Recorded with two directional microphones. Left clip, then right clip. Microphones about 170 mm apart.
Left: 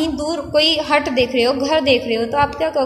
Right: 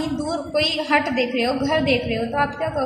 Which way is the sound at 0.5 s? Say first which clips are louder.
Left 5 dB; 55° left (ahead or behind).